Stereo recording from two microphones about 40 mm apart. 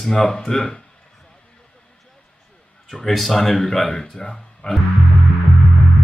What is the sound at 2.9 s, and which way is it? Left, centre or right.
Speech, centre.